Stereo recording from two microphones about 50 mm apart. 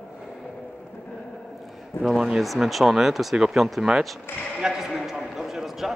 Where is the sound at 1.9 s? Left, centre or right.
Left.